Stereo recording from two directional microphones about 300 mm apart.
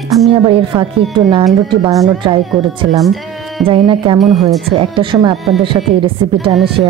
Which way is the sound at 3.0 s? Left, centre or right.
Centre.